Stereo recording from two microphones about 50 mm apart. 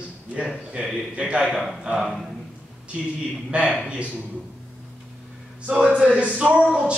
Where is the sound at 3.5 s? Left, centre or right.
Right.